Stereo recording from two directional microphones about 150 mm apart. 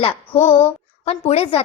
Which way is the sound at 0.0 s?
45° left (ahead or behind).